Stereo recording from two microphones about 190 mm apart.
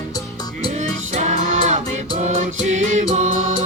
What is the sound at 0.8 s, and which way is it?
Music, 40° right (ahead or behind).